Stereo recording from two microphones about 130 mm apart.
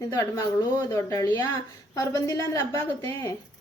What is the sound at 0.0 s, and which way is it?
A woman's voice, 25° left (ahead or behind).